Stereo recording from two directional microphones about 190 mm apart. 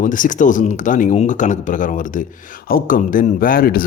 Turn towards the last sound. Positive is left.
turn(degrees=50)  # may be behind; listen again after turning